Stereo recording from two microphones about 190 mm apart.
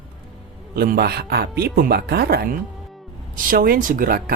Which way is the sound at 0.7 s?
55° right (ahead or behind).